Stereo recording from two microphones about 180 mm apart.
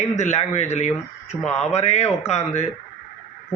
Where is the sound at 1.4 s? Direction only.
5° left (ahead or behind).